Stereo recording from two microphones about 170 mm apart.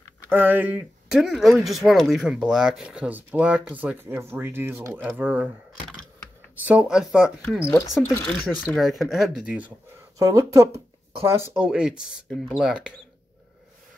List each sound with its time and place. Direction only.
0.3 s speech: 10° right (ahead or behind)
6.6 s speech: 10° right (ahead or behind)
10.1 s speech: 20° right (ahead or behind)